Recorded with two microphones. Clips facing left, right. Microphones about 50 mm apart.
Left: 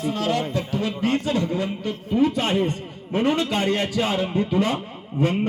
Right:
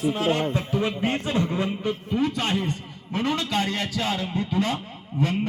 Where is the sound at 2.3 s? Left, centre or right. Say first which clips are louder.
Left 4 dB; centre.